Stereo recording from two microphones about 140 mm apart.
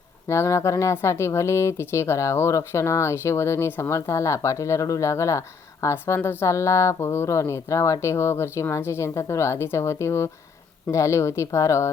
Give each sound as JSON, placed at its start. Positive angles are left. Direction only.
{"t": 0.3, "sound": "speech", "side_deg": 20}